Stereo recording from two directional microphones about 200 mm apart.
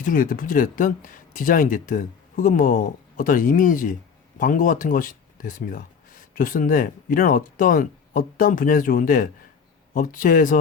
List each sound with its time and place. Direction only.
0.0 s speech: 40° left (ahead or behind)